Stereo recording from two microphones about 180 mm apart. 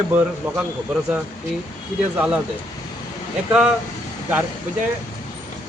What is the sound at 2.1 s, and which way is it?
Speech, 10° right (ahead or behind).